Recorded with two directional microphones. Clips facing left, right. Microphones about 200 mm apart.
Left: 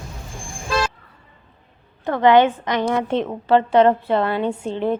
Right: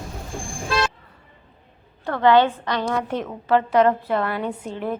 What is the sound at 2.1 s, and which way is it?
A woman's voice, 20° left (ahead or behind).